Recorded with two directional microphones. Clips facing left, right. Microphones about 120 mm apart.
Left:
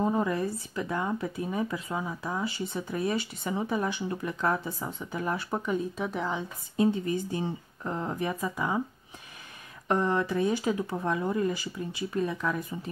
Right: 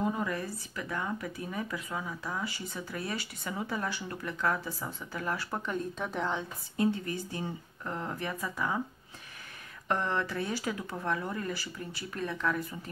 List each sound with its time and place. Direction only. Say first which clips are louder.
0.0 s speech: left 5 dB; 30° left (ahead or behind)
5.7 s speech: left 5 dB; 5° left (ahead or behind)
6.8 s speech: left 4 dB; 20° left (ahead or behind)
9.8 s speech: left 5 dB; 15° left (ahead or behind)